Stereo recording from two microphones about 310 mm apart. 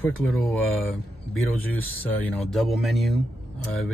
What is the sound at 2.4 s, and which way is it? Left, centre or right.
Speech, centre.